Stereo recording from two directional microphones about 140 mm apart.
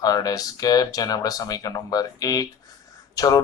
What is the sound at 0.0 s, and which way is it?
Speech, 25° left (ahead or behind).